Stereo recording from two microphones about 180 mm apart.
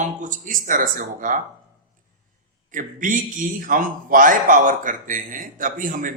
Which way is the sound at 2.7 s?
45° right (ahead or behind).